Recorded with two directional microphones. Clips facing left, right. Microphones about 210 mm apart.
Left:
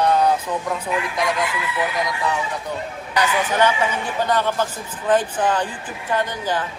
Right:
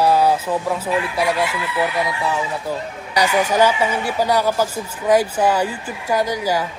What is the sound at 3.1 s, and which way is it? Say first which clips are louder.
Speech: right 3 dB; 10° right (ahead or behind).